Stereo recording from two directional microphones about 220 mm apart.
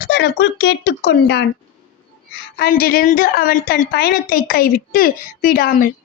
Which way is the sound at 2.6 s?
40° left (ahead or behind).